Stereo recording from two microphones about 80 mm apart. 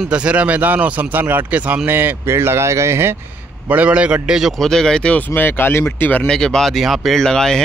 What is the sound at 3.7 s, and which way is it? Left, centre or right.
Speech, centre.